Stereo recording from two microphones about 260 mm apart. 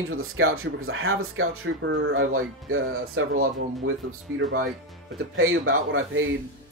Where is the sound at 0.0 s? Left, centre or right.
Right.